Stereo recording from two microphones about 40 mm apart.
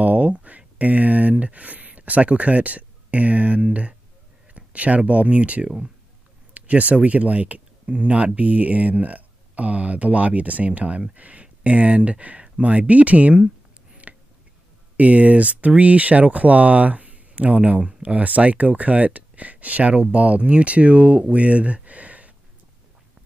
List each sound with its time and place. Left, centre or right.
0.0 s a sound: right
1.4 s speech: right
5.6 s speech: right
6.5 s speech: right
14.0 s a sound: right
15.0 s speech: right